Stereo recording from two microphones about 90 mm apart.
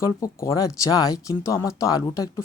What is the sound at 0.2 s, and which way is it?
Speech, 40° left (ahead or behind).